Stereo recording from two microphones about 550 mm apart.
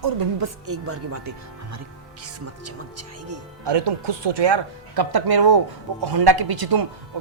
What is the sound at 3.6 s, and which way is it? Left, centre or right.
Speech, right.